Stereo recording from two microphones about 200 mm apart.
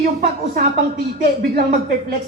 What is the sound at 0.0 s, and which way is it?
Speech, 45° right (ahead or behind).